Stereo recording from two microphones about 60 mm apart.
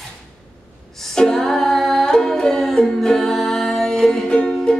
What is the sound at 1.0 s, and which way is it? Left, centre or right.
Music, centre.